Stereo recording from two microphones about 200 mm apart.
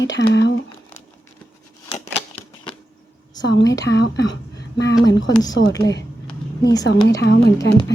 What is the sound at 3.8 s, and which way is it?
Speech, 55° left (ahead or behind).